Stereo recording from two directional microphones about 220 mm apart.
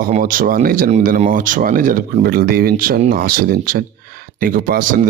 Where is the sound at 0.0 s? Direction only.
40° right (ahead or behind).